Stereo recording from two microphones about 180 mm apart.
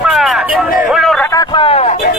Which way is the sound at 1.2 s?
20° left (ahead or behind).